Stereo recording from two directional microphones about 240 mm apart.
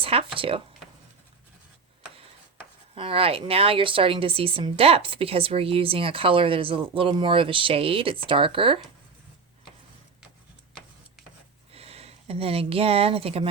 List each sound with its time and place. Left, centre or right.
0.0 s a woman's voice: right
2.9 s a woman's voice: right
11.7 s speech: right